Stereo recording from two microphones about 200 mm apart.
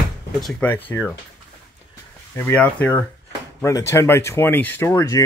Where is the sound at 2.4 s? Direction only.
10° left (ahead or behind).